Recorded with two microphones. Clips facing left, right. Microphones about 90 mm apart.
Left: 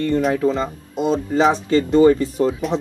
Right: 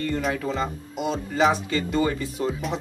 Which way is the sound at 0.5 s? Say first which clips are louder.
Left 6 dB; 25° left (ahead or behind).